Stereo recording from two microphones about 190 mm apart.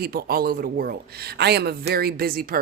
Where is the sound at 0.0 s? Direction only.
55° right (ahead or behind).